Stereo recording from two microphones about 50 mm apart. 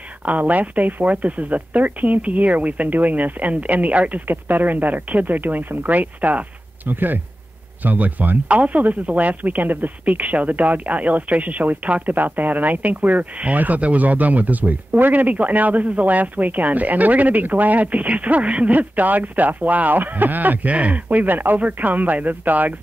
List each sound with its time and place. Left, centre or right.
0.2 s speech: right